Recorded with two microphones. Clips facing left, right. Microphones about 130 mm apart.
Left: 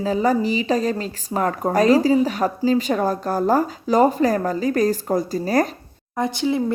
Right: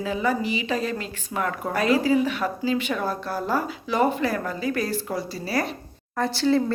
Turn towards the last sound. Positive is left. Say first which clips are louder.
# even
turn(degrees=15)  # may be behind; listen again after turning